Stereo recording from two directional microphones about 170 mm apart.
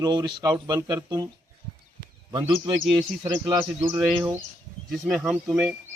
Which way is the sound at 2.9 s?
20° right (ahead or behind).